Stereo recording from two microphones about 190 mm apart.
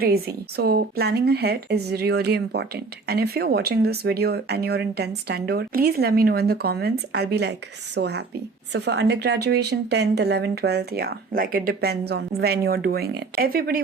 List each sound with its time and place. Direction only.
0.0 s a woman's voice: 55° right (ahead or behind)